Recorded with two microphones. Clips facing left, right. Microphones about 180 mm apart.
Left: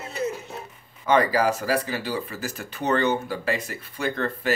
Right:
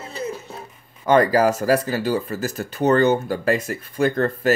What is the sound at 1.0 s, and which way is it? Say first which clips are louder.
Speech: right 4 dB; 45° right (ahead or behind).